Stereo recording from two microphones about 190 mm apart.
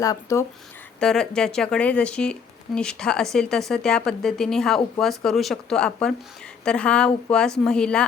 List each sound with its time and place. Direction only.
0.0 s speech: 15° left (ahead or behind)
0.9 s speech: 5° left (ahead or behind)